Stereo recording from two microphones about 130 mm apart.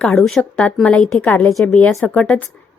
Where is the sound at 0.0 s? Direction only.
10° left (ahead or behind).